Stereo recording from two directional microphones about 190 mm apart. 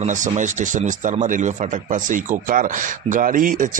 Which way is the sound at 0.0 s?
40° right (ahead or behind).